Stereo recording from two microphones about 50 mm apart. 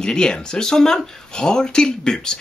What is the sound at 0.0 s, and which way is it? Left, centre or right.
Speech, centre.